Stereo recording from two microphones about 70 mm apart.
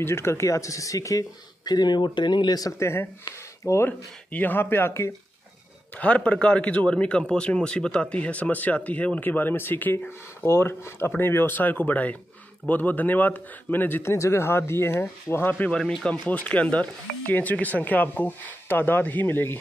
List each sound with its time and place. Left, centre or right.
0.0 s speech: left
1.6 s speech: left
2.8 s speech: left
3.6 s speech: left
4.3 s speech: left
5.9 s a man's voice: centre
14.1 s speech: left
15.7 s speech: centre
16.1 s a man's voice: centre